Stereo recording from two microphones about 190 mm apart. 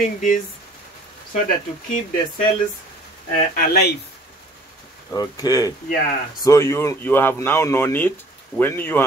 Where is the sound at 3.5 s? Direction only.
55° left (ahead or behind).